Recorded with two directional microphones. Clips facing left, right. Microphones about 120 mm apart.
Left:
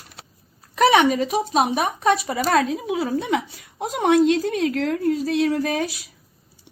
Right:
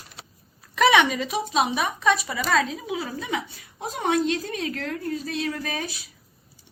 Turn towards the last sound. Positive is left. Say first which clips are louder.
# left 8 dB
turn(degrees=75)  # may be behind; listen again after turning